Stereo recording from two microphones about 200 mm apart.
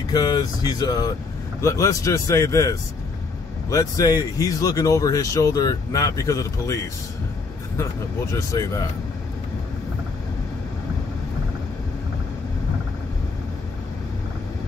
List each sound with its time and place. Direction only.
0.1 s speech: 20° left (ahead or behind)